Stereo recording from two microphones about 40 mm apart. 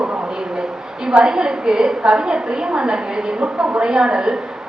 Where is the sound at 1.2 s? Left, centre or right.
Centre.